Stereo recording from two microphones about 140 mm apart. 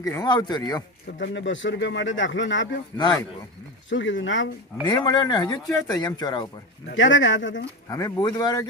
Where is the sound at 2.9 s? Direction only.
15° left (ahead or behind).